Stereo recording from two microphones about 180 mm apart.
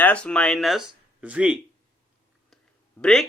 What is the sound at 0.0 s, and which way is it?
Speech, 5° left (ahead or behind).